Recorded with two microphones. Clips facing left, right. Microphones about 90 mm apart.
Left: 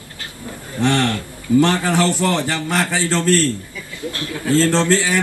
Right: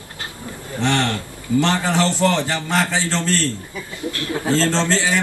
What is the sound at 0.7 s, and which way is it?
A man's voice, 20° right (ahead or behind).